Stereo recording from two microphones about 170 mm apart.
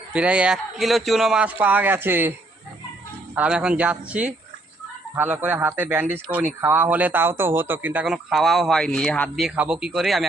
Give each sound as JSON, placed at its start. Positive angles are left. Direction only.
{"t": 0.1, "sound": "a man's voice", "side_deg": -5}
{"t": 3.3, "sound": "a man's voice", "side_deg": -5}